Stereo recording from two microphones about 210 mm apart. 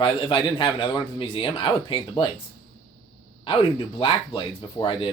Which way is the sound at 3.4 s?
25° left (ahead or behind).